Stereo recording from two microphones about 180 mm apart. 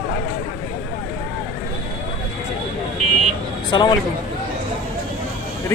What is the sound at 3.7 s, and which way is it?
Speech, 25° left (ahead or behind).